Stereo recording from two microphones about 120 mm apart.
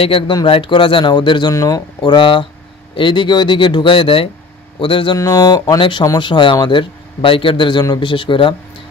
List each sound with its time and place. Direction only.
0.0 s a man's voice: 50° left (ahead or behind)
1.5 s speech: 30° left (ahead or behind)
2.0 s a man's voice: 45° left (ahead or behind)
5.2 s speech: 30° left (ahead or behind)
5.8 s a man's voice: 40° left (ahead or behind)